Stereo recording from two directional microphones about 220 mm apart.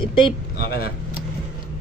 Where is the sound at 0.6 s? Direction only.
45° left (ahead or behind).